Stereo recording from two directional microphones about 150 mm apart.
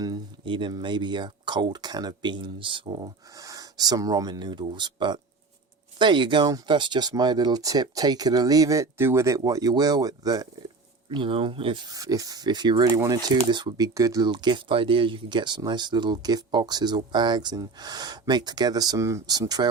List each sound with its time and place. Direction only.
0.0 s speech: 30° right (ahead or behind)
11.1 s speech: 35° right (ahead or behind)